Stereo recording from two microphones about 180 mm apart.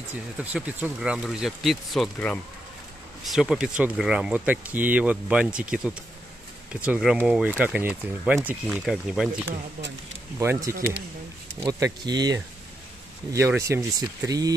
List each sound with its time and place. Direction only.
0.4 s speech: 10° right (ahead or behind)
10.4 s speech: 10° right (ahead or behind)